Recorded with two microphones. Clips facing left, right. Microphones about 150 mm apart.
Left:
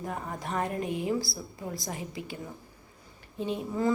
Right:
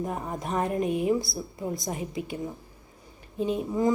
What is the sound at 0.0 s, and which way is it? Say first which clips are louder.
A woman's voice: right 4 dB; 20° right (ahead or behind).